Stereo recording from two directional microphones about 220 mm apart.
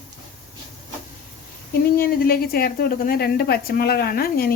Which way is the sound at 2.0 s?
45° left (ahead or behind).